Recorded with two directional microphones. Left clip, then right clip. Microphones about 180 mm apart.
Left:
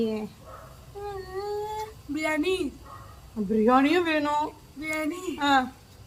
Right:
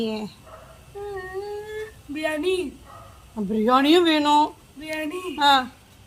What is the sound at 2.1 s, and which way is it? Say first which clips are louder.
Speech: right 2 dB; 15° right (ahead or behind).